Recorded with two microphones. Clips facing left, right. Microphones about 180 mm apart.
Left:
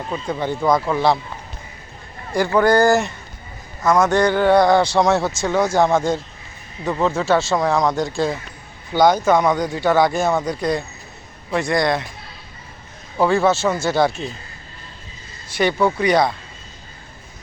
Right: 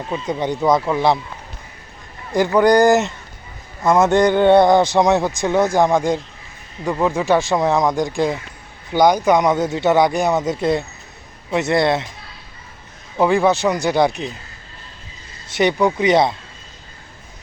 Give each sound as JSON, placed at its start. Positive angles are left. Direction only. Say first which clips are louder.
{"t": 0.1, "sound": "speech", "louder": "right 2 dB", "side_deg": -20}
{"t": 2.3, "sound": "speech", "louder": "right 2 dB", "side_deg": -20}
{"t": 13.1, "sound": "speech", "louder": "right 1 dB", "side_deg": -15}
{"t": 15.4, "sound": "speech", "louder": "right 1 dB", "side_deg": -20}